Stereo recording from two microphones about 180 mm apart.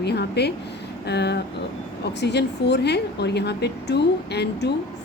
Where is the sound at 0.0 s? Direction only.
65° left (ahead or behind).